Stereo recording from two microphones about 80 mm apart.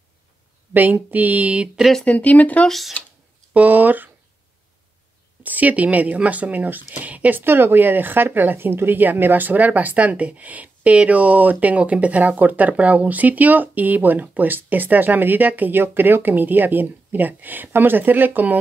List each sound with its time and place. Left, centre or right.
0.7 s speech: right
2.0 s speech: centre
3.5 s speech: centre
5.4 s speech: right